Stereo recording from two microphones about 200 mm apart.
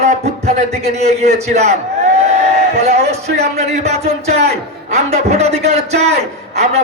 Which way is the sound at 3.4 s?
35° right (ahead or behind).